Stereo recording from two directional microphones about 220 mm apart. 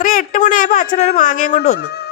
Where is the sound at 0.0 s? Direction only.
40° left (ahead or behind).